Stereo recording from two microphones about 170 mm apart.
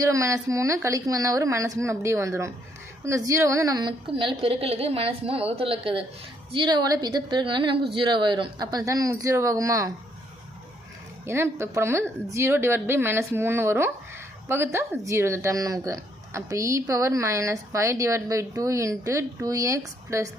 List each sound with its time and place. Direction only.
0.0 s a woman's voice: 20° right (ahead or behind)
11.3 s speech: 15° right (ahead or behind)